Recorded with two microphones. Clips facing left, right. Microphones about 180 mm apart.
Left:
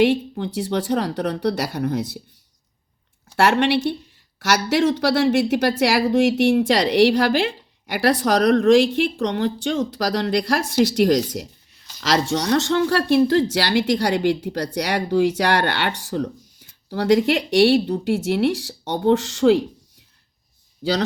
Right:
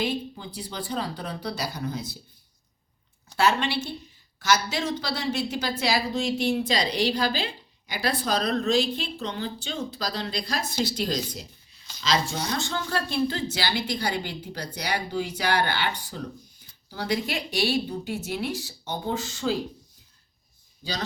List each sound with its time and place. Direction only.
0.0 s speech: 75° left (ahead or behind)
3.3 s a woman's voice: 80° left
20.8 s speech: 30° left (ahead or behind)